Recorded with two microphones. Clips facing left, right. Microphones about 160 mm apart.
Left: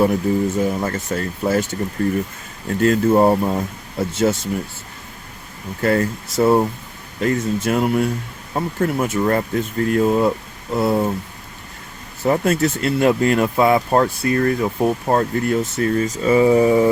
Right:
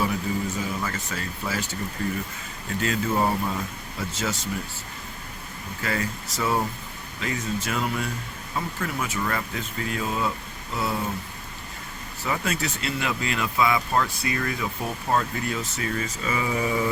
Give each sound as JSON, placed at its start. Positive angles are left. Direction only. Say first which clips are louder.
{"t": 0.0, "sound": "speech", "louder": "left 9 dB", "side_deg": 55}
{"t": 2.6, "sound": "speech", "louder": "left 10 dB", "side_deg": 50}
{"t": 5.8, "sound": "speech", "louder": "left 11 dB", "side_deg": 50}
{"t": 10.8, "sound": "speech", "louder": "left 10 dB", "side_deg": 60}
{"t": 12.2, "sound": "speech", "louder": "left 11 dB", "side_deg": 50}